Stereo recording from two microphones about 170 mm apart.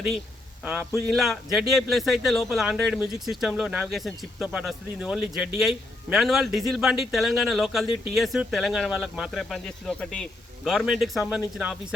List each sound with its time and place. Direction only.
0.6 s a man's voice: 5° right (ahead or behind)